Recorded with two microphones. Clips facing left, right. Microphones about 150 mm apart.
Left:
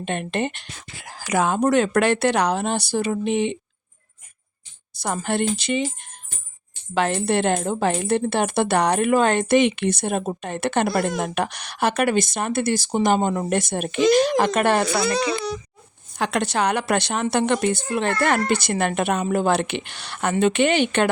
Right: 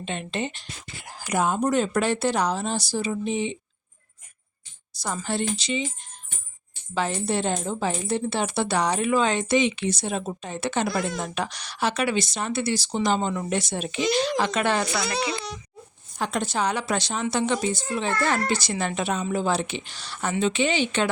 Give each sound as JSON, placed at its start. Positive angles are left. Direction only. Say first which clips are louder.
{"t": 0.0, "sound": "speech", "louder": "left 5 dB", "side_deg": 55}
{"t": 4.9, "sound": "a woman's voice", "louder": "left 4 dB", "side_deg": 60}
{"t": 16.1, "sound": "a woman's voice", "louder": "left 4 dB", "side_deg": 75}